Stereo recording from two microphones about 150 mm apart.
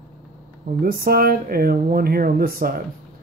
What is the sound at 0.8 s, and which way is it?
Speech, 85° right.